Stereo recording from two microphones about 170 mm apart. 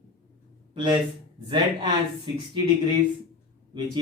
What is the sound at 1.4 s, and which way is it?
Speech, 30° right (ahead or behind).